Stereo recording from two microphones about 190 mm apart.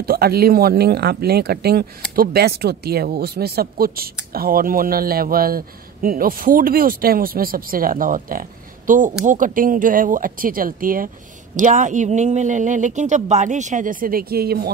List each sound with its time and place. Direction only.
0.0 s speech: 55° right (ahead or behind)